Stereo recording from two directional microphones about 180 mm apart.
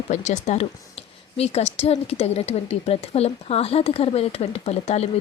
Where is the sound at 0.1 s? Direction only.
40° left (ahead or behind).